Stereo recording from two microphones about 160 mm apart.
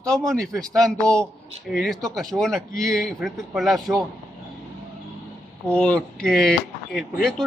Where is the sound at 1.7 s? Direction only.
Centre (ahead or behind).